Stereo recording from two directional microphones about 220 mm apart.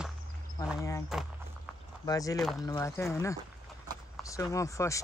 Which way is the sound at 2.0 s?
15° left (ahead or behind).